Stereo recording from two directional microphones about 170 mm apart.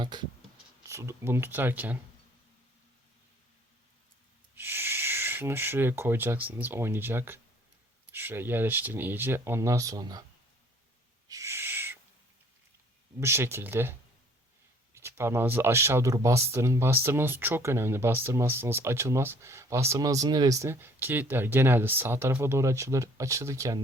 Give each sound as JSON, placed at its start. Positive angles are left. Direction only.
{"t": 0.0, "sound": "speech", "side_deg": -25}
{"t": 0.9, "sound": "speech", "side_deg": -15}
{"t": 4.5, "sound": "speech", "side_deg": -15}
{"t": 11.3, "sound": "owl", "side_deg": -15}
{"t": 13.1, "sound": "speech", "side_deg": -15}
{"t": 14.9, "sound": "speech", "side_deg": -15}